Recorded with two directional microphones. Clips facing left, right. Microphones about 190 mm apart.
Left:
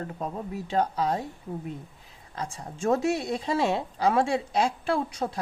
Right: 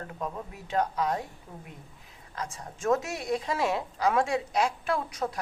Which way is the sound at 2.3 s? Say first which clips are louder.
Left 2 dB; 30° left (ahead or behind).